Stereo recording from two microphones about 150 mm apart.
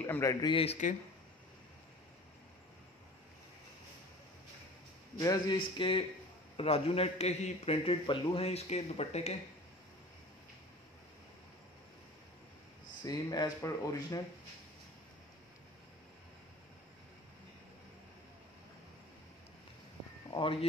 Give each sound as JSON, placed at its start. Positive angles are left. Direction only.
{"t": 0.0, "sound": "speech", "side_deg": 15}
{"t": 5.2, "sound": "speech", "side_deg": 25}
{"t": 5.6, "sound": "a man's voice", "side_deg": 35}
{"t": 13.0, "sound": "speech", "side_deg": 25}